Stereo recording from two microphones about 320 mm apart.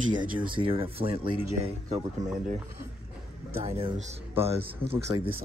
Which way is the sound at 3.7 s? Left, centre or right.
Centre.